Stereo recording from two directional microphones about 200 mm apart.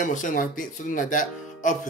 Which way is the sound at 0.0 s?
40° left (ahead or behind).